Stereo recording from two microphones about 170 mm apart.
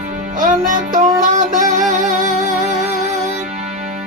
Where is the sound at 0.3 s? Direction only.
50° right (ahead or behind).